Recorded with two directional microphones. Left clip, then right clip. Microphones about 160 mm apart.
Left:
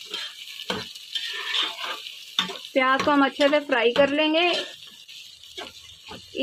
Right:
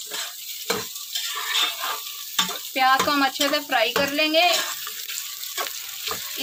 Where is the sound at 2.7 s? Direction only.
30° left (ahead or behind).